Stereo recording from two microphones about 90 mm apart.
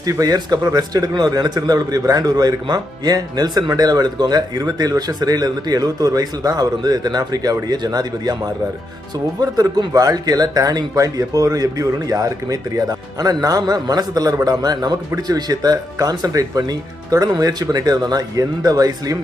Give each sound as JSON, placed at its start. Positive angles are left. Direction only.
{"t": 0.0, "sound": "speech", "side_deg": -40}